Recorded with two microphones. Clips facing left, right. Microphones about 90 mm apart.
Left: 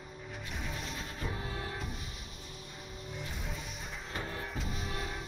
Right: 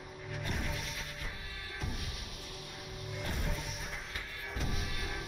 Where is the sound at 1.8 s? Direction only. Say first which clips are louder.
Even; 5° right (ahead or behind).